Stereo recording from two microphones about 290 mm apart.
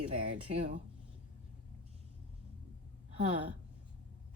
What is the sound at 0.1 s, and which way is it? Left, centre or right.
Speech, right.